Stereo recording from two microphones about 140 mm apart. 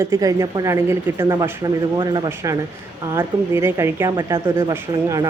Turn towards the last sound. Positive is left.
turn(degrees=-20)  # may be behind; listen again after turning